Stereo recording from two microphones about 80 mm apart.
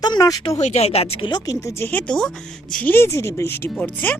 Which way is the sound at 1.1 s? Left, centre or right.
Left.